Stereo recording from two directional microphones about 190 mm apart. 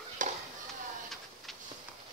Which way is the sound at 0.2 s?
45° right (ahead or behind).